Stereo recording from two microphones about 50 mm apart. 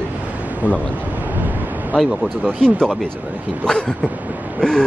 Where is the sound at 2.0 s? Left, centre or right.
Centre.